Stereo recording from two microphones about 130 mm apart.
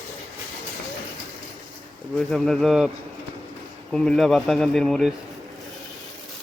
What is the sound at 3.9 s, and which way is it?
Speech, 5° left (ahead or behind).